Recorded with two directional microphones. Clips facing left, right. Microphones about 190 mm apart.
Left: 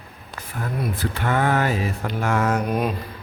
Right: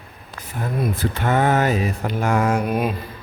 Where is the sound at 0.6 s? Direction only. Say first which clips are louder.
Right 3 dB; 20° right (ahead or behind); by 2.9 s 5° right (ahead or behind).